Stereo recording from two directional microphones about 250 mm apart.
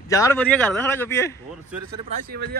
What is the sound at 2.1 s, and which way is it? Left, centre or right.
Speech, right.